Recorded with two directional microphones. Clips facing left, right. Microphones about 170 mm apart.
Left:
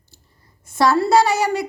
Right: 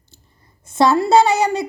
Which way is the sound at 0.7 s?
20° right (ahead or behind).